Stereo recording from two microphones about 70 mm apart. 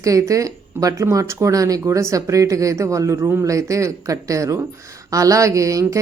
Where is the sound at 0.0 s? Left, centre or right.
Right.